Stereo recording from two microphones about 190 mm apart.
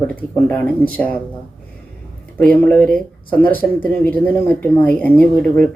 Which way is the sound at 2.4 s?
5° left (ahead or behind).